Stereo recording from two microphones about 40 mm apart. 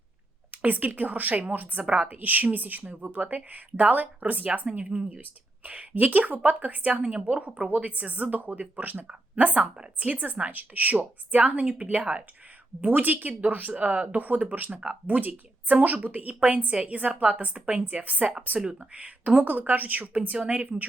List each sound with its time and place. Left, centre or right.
0.5 s a woman's voice: right
7.0 s a woman's voice: right
7.3 s a woman's voice: right
17.8 s a woman's voice: right
18.6 s speech: centre
18.9 s a woman's voice: right
19.5 s a woman's voice: right
20.3 s a woman's voice: right